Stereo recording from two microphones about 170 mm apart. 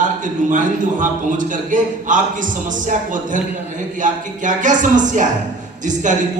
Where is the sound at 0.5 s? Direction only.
50° right (ahead or behind).